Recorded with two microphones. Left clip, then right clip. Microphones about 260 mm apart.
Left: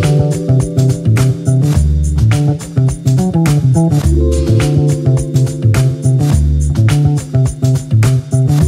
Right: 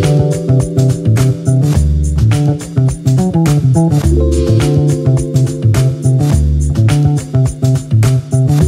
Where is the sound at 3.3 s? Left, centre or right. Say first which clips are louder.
Right 1 dB; left.